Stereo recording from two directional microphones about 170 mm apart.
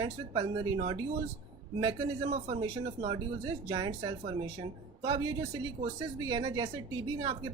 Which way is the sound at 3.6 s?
25° right (ahead or behind).